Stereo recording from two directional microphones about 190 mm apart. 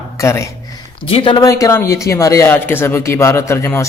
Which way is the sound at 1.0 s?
30° left (ahead or behind).